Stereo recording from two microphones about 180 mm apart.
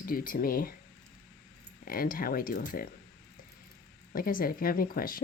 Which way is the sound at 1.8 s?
50° left (ahead or behind).